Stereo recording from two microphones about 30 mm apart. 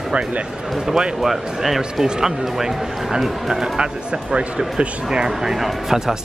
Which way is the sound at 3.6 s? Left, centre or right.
Right.